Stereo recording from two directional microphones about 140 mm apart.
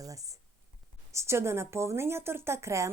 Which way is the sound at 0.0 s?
25° right (ahead or behind).